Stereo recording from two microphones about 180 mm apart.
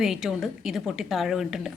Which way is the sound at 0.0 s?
Centre (ahead or behind).